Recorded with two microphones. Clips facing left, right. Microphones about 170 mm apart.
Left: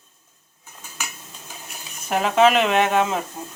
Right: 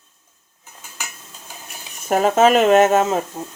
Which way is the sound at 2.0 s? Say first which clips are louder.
Right 3 dB; 45° right (ahead or behind).